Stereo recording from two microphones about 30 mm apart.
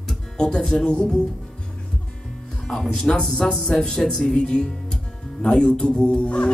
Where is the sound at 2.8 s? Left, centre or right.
Centre.